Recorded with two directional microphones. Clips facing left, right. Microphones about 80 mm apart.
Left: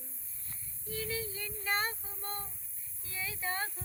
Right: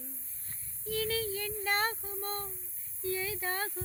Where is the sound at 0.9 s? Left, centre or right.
Right.